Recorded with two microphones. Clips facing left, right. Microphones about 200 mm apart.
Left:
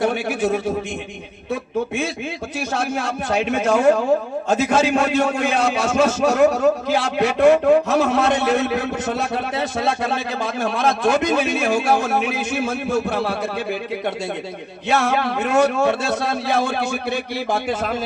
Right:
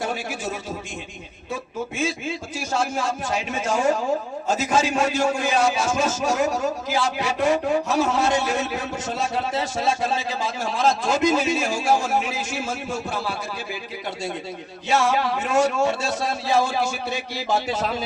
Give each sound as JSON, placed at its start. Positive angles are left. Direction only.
{"t": 0.0, "sound": "a man's voice", "side_deg": 60}
{"t": 2.6, "sound": "a man's voice", "side_deg": 60}
{"t": 14.8, "sound": "a man's voice", "side_deg": 60}